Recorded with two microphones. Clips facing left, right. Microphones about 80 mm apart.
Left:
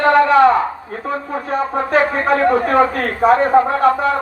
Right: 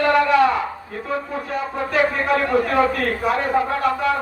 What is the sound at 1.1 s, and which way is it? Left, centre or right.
Speech, left.